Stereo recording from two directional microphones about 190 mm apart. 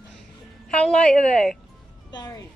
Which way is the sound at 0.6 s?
5° left (ahead or behind).